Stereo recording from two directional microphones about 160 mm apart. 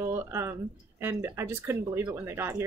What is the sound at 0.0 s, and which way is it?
Speech, 15° right (ahead or behind).